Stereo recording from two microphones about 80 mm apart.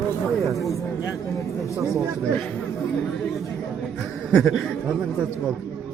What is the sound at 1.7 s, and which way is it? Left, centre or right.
Speech, right.